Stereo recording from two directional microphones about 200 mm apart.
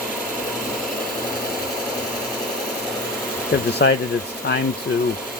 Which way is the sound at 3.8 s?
55° left (ahead or behind).